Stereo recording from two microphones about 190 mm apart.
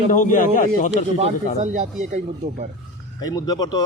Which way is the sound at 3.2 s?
20° left (ahead or behind).